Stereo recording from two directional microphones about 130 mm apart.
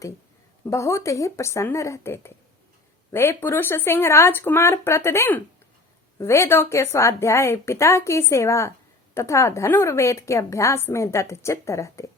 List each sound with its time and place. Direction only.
0.6 s a woman's voice: 25° left (ahead or behind)